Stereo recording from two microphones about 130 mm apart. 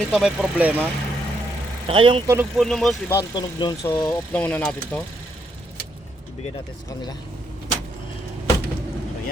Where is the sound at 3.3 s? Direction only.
35° left (ahead or behind).